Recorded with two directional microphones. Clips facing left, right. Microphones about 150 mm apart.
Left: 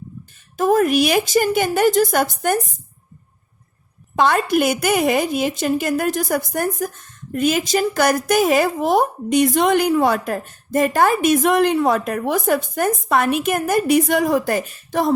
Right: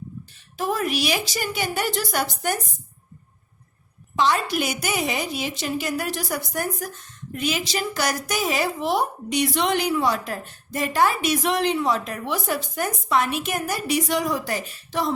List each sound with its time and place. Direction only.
0.5 s a woman's voice: 45° left (ahead or behind)
4.1 s a woman's voice: 55° left (ahead or behind)